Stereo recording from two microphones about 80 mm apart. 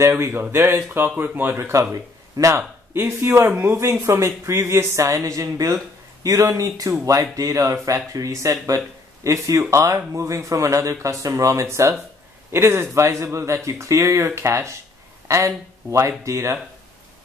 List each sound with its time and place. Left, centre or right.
0.0 s speech: right
1.8 s speech: right
4.0 s speech: right